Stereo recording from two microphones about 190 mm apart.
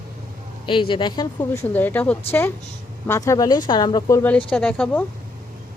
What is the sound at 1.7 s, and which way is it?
A woman's voice, 10° left (ahead or behind).